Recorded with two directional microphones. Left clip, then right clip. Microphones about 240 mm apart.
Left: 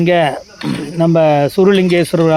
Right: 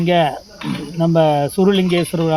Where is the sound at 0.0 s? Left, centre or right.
Left.